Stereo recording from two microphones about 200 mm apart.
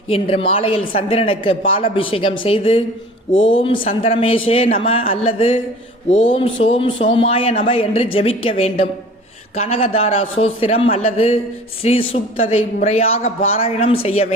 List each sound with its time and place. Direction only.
0.1 s a man's voice: 30° left (ahead or behind)